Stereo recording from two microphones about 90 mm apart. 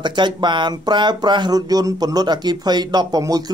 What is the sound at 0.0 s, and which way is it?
Speech, 55° right (ahead or behind).